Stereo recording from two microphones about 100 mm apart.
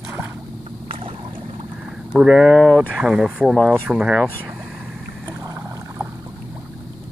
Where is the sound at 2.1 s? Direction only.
5° right (ahead or behind).